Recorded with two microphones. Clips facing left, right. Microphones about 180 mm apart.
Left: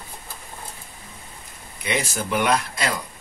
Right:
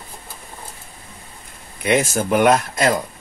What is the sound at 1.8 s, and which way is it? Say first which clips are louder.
Speech: right 8 dB; 50° right (ahead or behind).